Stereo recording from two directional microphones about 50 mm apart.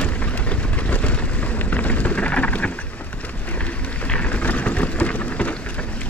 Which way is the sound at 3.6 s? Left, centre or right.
Left.